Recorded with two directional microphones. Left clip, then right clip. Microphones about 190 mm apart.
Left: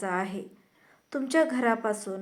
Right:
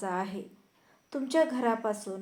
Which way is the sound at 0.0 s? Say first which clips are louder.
Left 3 dB; 20° left (ahead or behind).